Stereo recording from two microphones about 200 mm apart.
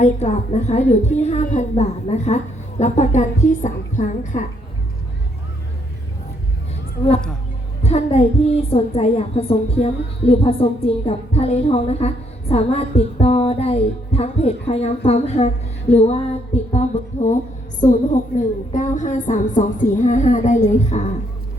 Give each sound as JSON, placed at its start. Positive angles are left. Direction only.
{"t": 0.0, "sound": "a woman's voice", "side_deg": 35}
{"t": 7.8, "sound": "a woman's voice", "side_deg": 30}